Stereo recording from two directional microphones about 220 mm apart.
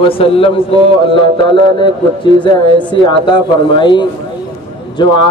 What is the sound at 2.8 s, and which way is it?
A man's voice, 20° left (ahead or behind).